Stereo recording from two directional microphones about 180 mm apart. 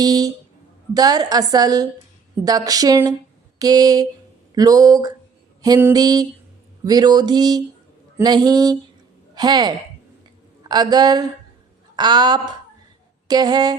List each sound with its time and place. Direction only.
0.0 s a woman's voice: 20° right (ahead or behind)